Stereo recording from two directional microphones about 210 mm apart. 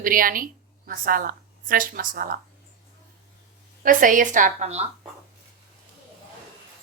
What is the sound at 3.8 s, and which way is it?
Speech, 40° right (ahead or behind).